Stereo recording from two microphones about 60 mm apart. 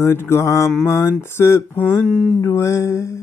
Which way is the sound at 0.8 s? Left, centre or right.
Left.